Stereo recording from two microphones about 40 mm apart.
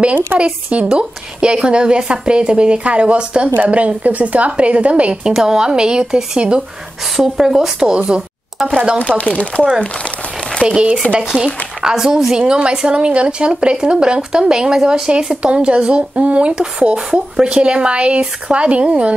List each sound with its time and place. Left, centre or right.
0.0 s a woman's voice: right
0.8 s a woman's voice: right
5.2 s a woman's voice: centre
7.2 s speech: centre
7.9 s a woman's voice: right
9.2 s speech: left
10.7 s a woman's voice: right
11.4 s a woman's voice: centre; by 19.1 s right